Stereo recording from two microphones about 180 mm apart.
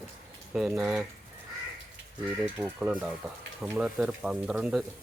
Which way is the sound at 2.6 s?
10° right (ahead or behind).